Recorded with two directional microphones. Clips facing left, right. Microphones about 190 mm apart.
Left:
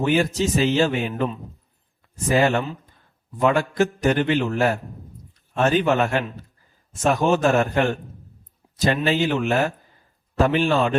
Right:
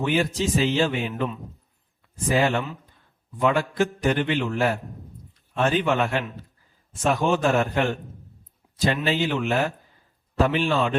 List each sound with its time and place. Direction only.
0.0 s a man's voice: 45° left (ahead or behind)
8.7 s a sound: 45° left (ahead or behind)
9.0 s a man's voice: 45° left (ahead or behind)